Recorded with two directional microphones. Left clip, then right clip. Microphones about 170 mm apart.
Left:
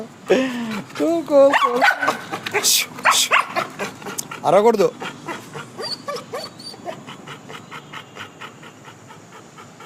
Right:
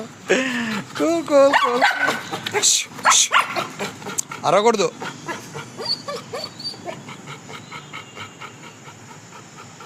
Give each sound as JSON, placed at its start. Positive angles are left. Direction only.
{"t": 0.3, "sound": "speech", "side_deg": 10}
{"t": 1.5, "sound": "speech", "side_deg": 0}
{"t": 2.6, "sound": "speech", "side_deg": 15}
{"t": 3.3, "sound": "dog", "side_deg": -5}
{"t": 4.4, "sound": "speech", "side_deg": 20}
{"t": 4.9, "sound": "dog", "side_deg": 0}